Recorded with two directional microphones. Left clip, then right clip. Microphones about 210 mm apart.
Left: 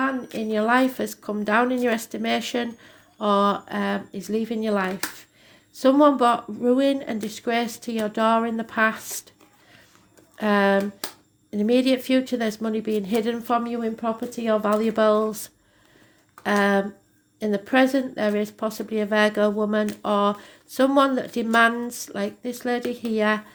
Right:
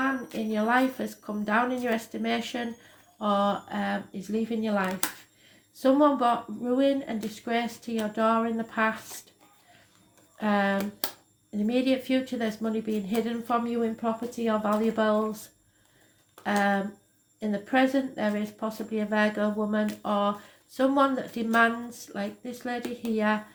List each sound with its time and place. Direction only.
0.5 s speech: 45° left (ahead or behind)
10.3 s speech: 50° left (ahead or behind)